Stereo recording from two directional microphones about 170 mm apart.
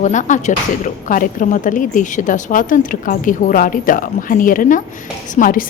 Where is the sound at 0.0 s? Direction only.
45° left (ahead or behind).